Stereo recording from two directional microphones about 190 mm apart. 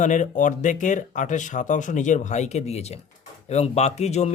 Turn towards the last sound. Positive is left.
turn(degrees=35)  # may be behind; listen again after turning